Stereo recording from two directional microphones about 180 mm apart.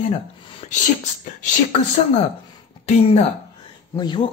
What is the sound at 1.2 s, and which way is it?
Speech, 45° left (ahead or behind).